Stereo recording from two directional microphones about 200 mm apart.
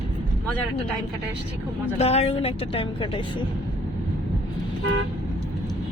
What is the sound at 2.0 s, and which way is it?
A woman's voice, 30° left (ahead or behind).